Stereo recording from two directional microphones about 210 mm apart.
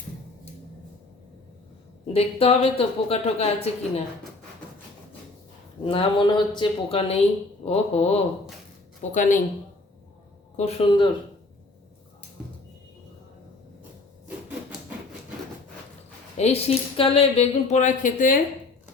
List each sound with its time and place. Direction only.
2.1 s a woman's voice: 30° left (ahead or behind)
5.8 s a woman's voice: 25° left (ahead or behind)
10.6 s a woman's voice: 25° left (ahead or behind)
16.4 s speech: 30° left (ahead or behind)